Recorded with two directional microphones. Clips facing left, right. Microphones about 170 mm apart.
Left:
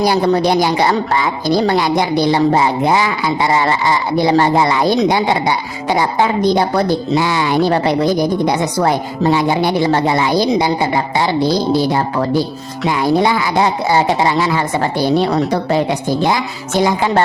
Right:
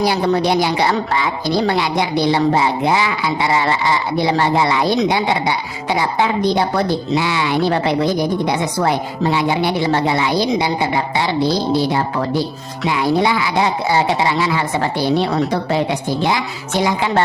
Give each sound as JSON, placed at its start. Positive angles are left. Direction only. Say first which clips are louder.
{"t": 0.0, "sound": "a woman's voice", "louder": "left 3 dB", "side_deg": 45}
{"t": 12.9, "sound": "a woman's voice", "louder": "left 2 dB", "side_deg": 45}
{"t": 16.8, "sound": "a woman's voice", "louder": "left 3 dB", "side_deg": 45}